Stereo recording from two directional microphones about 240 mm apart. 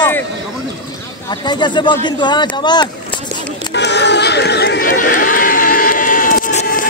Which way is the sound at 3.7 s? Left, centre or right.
Left.